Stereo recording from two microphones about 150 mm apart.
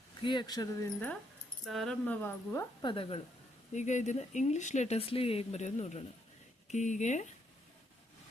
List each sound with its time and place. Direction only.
0.2 s speech: 30° left (ahead or behind)
0.9 s speech: 10° left (ahead or behind)
2.8 s speech: 35° left (ahead or behind)
3.7 s speech: 50° left (ahead or behind)